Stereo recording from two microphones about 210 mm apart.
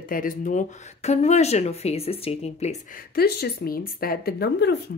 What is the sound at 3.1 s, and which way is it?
Speech, 50° left (ahead or behind).